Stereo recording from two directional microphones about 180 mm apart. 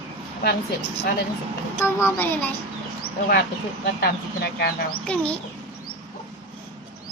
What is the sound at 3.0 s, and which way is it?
Speech, 60° left (ahead or behind).